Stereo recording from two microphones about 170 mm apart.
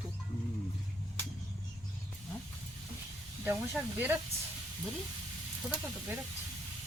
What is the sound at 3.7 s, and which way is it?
Speech, 10° right (ahead or behind).